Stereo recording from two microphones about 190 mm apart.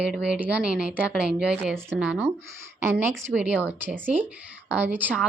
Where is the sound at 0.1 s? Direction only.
5° right (ahead or behind).